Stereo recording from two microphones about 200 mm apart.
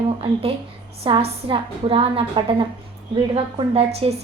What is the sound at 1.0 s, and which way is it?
A woman's voice, 25° right (ahead or behind).